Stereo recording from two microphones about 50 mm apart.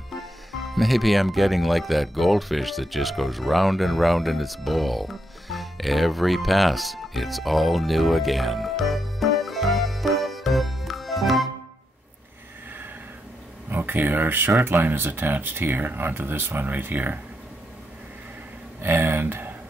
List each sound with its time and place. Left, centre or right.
0.1 s speech: centre
13.7 s speech: right
18.8 s a sound: right